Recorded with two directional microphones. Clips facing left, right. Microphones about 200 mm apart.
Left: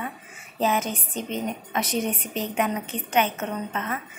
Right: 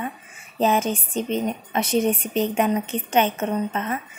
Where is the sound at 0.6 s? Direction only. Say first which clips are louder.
Right 4 dB; 30° right (ahead or behind).